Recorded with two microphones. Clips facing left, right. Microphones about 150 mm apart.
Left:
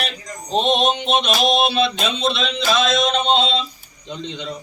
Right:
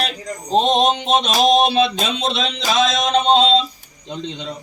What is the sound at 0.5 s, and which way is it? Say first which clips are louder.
A man's voice: right 2 dB; 40° right (ahead or behind).